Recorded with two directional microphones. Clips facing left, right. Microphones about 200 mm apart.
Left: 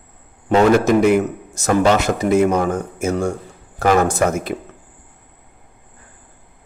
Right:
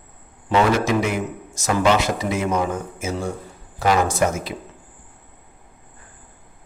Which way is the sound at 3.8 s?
60° left (ahead or behind).